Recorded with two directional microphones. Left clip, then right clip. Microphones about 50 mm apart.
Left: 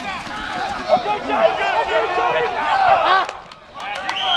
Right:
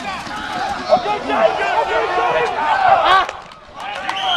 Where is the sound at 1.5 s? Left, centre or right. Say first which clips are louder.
Right 1 dB; left.